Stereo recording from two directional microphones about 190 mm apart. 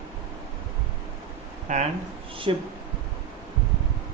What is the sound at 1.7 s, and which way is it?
Speech, 40° right (ahead or behind).